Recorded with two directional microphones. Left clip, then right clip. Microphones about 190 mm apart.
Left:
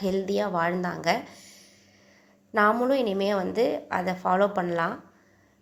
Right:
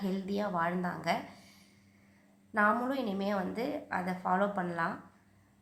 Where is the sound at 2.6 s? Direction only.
30° left (ahead or behind).